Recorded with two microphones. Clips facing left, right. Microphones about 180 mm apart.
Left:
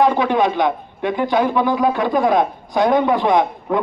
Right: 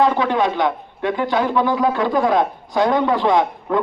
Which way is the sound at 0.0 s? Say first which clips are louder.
Left 1 dB; 15° left (ahead or behind).